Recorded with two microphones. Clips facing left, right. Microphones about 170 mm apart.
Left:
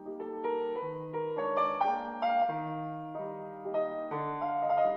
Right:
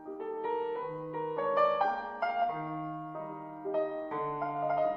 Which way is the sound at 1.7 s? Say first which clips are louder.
Left 1 dB; 20° left (ahead or behind).